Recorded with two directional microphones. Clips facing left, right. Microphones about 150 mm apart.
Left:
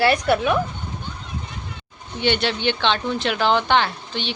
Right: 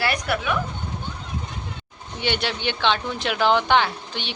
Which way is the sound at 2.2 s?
10° right (ahead or behind).